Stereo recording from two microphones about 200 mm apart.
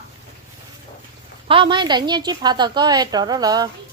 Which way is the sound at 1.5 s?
25° right (ahead or behind).